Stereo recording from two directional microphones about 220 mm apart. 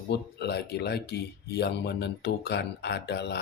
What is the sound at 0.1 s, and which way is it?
Speech, 50° left (ahead or behind).